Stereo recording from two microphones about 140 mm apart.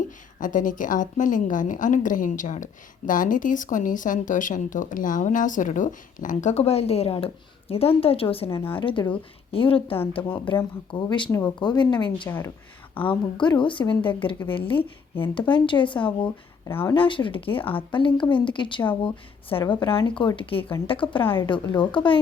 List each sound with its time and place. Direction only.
0.3 s a woman's voice: 70° left (ahead or behind); by 10.0 s 40° left (ahead or behind)
10.2 s speech: 10° left (ahead or behind)
10.5 s speech: 35° left (ahead or behind)
11.3 s speech: 20° left (ahead or behind)
11.6 s speech: 35° left (ahead or behind)
12.9 s a woman's voice: 10° left (ahead or behind)
13.3 s speech: 35° left (ahead or behind)
16.6 s speech: 20° left (ahead or behind)
16.9 s speech: 35° left (ahead or behind)